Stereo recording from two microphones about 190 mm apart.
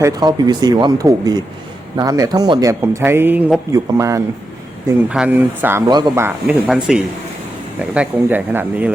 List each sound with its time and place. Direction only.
0.0 s speech: 20° right (ahead or behind)
5.0 s speech: 5° right (ahead or behind)